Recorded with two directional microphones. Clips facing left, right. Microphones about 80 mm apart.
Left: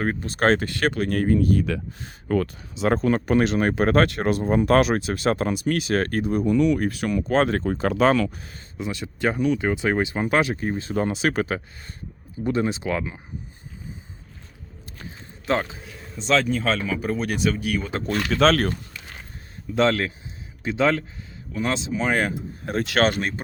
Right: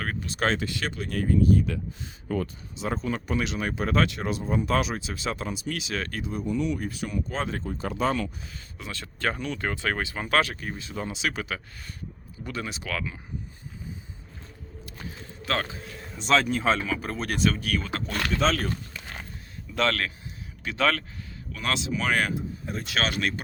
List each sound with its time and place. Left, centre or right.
0.0 s speech: left
0.3 s speech: left
2.0 s speech: left
3.2 s speech: left
6.4 s speech: left
8.8 s speech: centre; by 11.6 s left
12.4 s speech: left
15.4 s speech: left
16.1 s speech: centre
18.1 s speech: left
19.7 s speech: left
22.6 s speech: left
23.0 s speech: left